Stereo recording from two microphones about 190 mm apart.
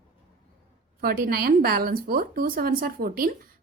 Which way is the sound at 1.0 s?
50° right (ahead or behind).